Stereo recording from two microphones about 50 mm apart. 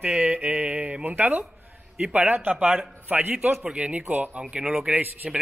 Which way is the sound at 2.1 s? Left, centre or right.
Right.